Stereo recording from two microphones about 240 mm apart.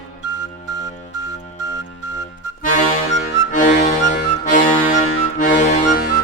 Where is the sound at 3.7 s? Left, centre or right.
Left.